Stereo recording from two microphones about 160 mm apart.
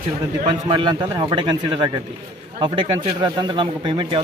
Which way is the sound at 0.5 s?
30° right (ahead or behind).